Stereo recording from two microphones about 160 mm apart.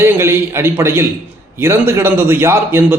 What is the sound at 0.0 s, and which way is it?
A man's voice, 15° right (ahead or behind).